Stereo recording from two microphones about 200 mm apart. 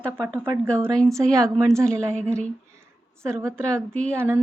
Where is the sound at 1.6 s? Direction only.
15° right (ahead or behind).